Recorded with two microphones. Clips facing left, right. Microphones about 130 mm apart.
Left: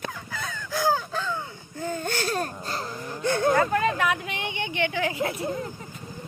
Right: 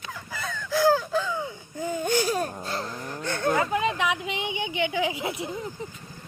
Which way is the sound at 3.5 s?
15° right (ahead or behind).